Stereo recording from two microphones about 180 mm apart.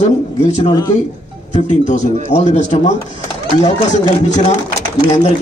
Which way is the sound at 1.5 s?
40° left (ahead or behind).